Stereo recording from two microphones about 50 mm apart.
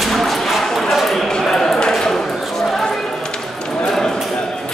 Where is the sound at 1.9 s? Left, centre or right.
Centre.